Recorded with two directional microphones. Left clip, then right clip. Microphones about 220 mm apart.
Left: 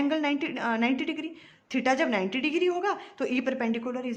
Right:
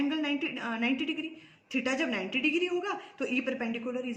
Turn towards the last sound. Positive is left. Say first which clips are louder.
# left 3 dB
turn(degrees=50)  # may be behind; listen again after turning